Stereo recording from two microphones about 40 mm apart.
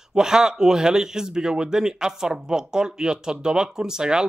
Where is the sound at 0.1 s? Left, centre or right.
Centre.